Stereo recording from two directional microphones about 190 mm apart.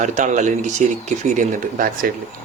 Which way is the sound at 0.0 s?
40° right (ahead or behind).